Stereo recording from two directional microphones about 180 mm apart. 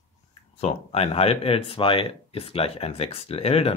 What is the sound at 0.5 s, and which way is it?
Speech, 35° left (ahead or behind).